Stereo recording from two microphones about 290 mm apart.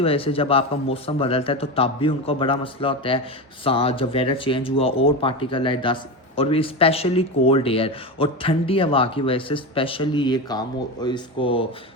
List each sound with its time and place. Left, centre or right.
0.0 s speech: centre